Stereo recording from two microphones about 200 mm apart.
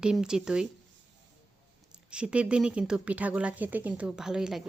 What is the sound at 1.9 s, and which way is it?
Speech, 5° right (ahead or behind).